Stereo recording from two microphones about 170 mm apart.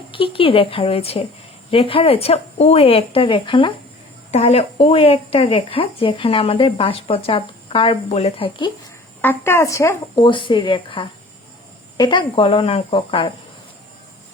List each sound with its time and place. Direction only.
0.1 s speech: 30° left (ahead or behind)
9.2 s speech: 15° left (ahead or behind)
10.2 s speech: 30° left (ahead or behind)